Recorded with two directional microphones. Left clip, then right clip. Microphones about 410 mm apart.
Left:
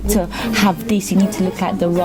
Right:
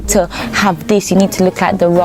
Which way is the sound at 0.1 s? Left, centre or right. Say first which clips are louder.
Right 5 dB; right.